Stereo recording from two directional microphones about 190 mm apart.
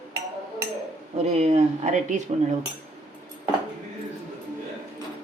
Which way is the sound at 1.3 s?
35° right (ahead or behind).